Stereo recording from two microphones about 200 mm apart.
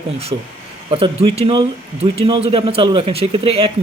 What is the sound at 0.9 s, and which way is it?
Speech, 25° right (ahead or behind).